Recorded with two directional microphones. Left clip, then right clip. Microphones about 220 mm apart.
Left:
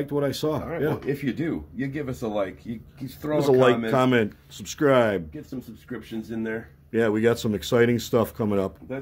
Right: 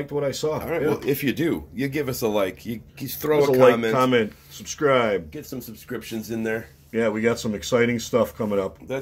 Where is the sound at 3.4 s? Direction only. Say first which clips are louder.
Right 3 dB; 35° left (ahead or behind).